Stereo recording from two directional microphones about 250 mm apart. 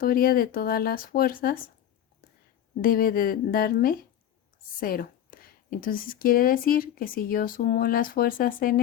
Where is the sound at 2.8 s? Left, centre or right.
Left.